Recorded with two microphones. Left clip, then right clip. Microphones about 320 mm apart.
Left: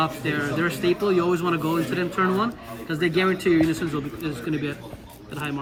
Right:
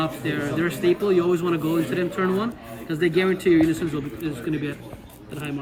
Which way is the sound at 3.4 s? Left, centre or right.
Left.